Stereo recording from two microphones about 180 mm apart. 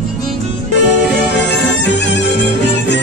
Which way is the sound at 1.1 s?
75° left (ahead or behind).